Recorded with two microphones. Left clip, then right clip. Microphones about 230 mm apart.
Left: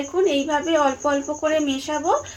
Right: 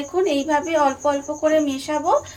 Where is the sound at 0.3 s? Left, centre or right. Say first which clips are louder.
Even; left.